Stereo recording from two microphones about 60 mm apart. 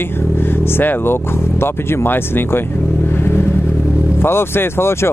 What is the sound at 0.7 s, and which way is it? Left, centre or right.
Speech, left.